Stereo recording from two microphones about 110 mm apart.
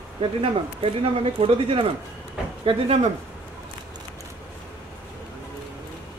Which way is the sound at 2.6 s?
75° right (ahead or behind).